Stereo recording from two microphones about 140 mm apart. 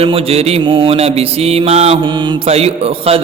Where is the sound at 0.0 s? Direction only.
45° right (ahead or behind).